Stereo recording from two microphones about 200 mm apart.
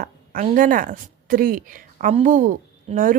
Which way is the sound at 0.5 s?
40° right (ahead or behind).